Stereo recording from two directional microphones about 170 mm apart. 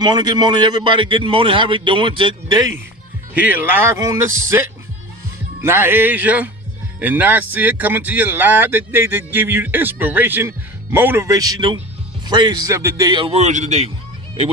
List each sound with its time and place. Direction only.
0.0 s a man's voice: 25° right (ahead or behind)
3.3 s a man's voice: 10° right (ahead or behind); by 13.8 s 45° right (ahead or behind)